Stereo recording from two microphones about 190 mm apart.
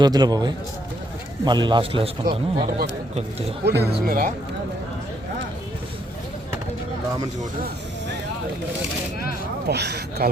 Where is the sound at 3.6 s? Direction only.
60° right (ahead or behind).